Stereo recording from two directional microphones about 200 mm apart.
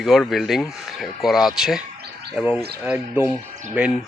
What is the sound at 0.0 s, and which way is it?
Speech, centre (ahead or behind).